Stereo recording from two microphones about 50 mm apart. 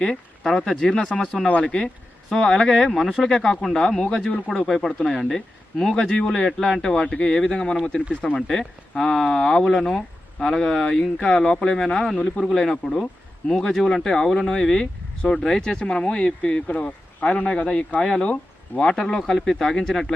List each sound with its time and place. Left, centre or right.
0.0 s speech: centre
4.3 s speech: left
4.5 s speech: centre; by 18.0 s left
18.0 s speech: centre